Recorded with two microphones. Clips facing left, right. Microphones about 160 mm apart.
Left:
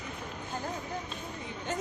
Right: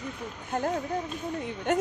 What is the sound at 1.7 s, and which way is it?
Speech, 65° right (ahead or behind).